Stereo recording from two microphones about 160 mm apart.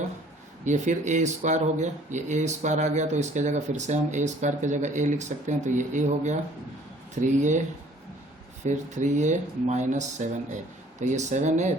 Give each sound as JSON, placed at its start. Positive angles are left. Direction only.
{"t": 0.6, "sound": "speech", "side_deg": -50}
{"t": 8.6, "sound": "speech", "side_deg": -50}